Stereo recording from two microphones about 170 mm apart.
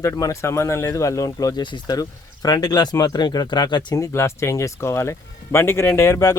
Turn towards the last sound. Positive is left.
turn(degrees=20)  # may be behind; listen again after turning